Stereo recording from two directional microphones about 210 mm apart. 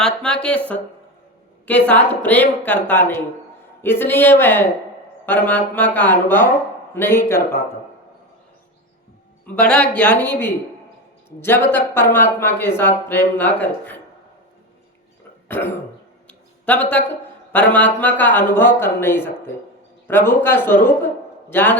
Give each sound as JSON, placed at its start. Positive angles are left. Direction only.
{"t": 0.0, "sound": "speech", "side_deg": 5}
{"t": 1.6, "sound": "speech", "side_deg": 5}
{"t": 9.6, "sound": "speech", "side_deg": 5}
{"t": 15.4, "sound": "throat clearing", "side_deg": 10}
{"t": 16.2, "sound": "a sound", "side_deg": 5}
{"t": 17.5, "sound": "speech", "side_deg": 10}